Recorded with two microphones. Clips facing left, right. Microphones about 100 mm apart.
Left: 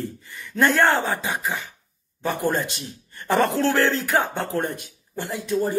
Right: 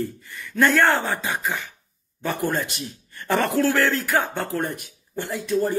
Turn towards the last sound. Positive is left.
turn(degrees=20)  # may be behind; listen again after turning